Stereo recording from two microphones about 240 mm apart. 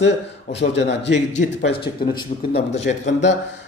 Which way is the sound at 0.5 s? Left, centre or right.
Left.